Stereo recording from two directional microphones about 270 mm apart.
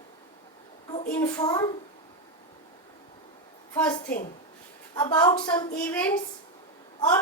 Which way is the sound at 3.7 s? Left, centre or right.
Centre.